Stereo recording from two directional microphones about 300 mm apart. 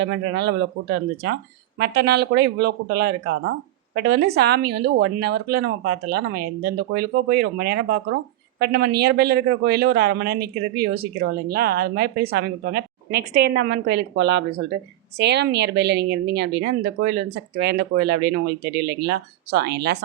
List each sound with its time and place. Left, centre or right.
0.0 s speech: right